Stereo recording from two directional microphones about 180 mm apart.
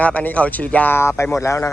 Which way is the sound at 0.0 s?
10° left (ahead or behind).